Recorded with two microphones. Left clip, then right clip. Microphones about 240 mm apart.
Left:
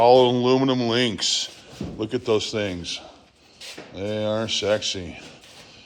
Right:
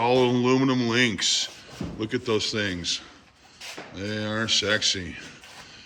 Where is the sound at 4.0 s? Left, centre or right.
Centre.